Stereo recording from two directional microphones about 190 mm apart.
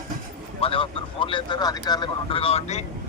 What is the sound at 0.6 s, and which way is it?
A man's voice, 30° left (ahead or behind).